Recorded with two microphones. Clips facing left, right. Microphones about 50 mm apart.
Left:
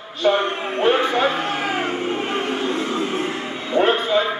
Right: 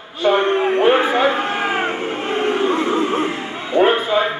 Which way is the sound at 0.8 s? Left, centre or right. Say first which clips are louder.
Even; centre.